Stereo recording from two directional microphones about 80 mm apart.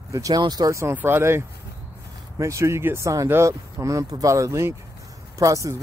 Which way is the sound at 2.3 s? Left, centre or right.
Right.